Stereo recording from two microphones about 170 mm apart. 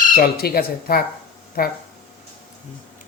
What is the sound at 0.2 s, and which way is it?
Speech, 65° left (ahead or behind).